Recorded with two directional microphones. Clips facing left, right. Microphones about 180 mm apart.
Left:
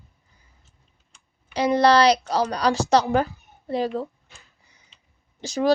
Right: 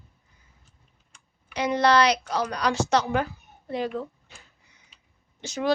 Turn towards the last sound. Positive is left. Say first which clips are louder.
# left 5 dB
turn(degrees=35)  # may be behind; listen again after turning